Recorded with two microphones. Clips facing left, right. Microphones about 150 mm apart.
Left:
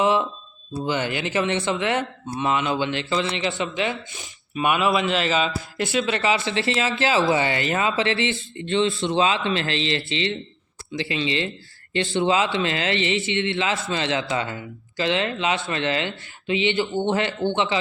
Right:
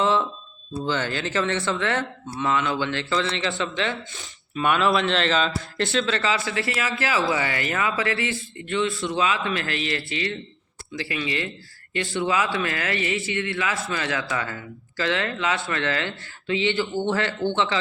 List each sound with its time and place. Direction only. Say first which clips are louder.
0.0 s a sound: left 2 dB; 15° left (ahead or behind)
0.8 s speech: left 1 dB; 15° left (ahead or behind)
6.1 s speech: left 2 dB; 20° left (ahead or behind)